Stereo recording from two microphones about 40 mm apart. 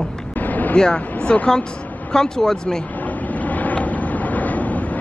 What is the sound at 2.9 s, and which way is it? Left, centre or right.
Boat, left.